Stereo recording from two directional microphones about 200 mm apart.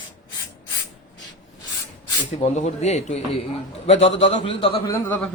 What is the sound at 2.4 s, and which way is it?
A man's voice, 35° left (ahead or behind).